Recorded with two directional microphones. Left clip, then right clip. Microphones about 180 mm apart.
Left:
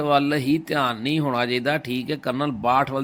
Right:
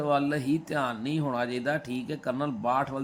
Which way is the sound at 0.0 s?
20° left (ahead or behind).